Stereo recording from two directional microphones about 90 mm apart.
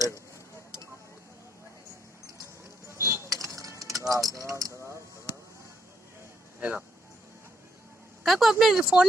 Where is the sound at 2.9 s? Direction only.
30° right (ahead or behind).